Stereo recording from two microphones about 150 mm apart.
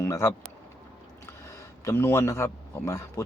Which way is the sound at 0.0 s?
20° left (ahead or behind).